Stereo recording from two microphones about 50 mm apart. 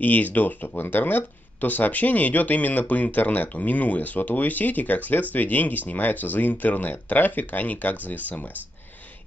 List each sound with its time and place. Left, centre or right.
0.0 s speech: left